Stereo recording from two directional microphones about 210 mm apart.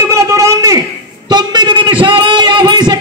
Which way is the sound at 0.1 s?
15° right (ahead or behind).